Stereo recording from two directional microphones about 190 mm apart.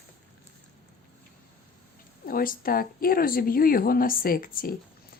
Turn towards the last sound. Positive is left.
turn(degrees=50)  # may be behind; listen again after turning